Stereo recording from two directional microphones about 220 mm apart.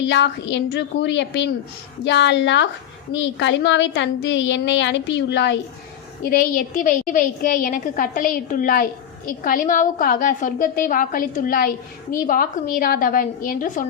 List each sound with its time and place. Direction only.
0.1 s a woman's voice: 55° left (ahead or behind)
6.2 s a woman's voice: 40° left (ahead or behind)